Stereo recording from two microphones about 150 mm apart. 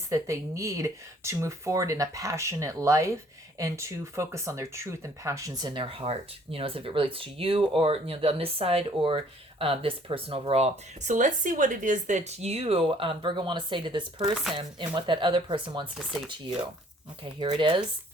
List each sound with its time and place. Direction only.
0.1 s speech: 20° right (ahead or behind)
16.0 s chopping: centre (ahead or behind)
17.4 s speech: 30° right (ahead or behind)